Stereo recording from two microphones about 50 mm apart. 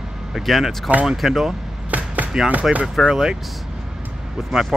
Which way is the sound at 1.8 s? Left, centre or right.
Right.